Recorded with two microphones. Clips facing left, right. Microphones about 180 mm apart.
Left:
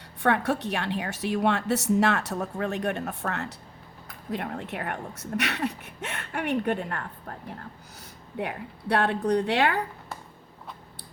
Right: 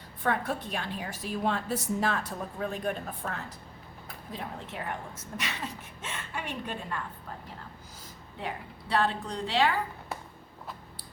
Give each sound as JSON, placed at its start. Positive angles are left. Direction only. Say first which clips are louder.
{"t": 0.2, "sound": "a woman's voice", "louder": "left 5 dB", "side_deg": 75}
{"t": 8.4, "sound": "speech", "louder": "left 5 dB", "side_deg": 65}